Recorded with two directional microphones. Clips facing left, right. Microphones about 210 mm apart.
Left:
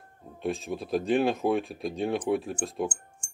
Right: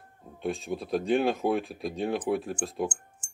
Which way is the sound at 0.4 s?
Centre (ahead or behind).